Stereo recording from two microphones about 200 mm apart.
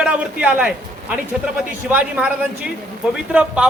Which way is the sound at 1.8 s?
5° right (ahead or behind).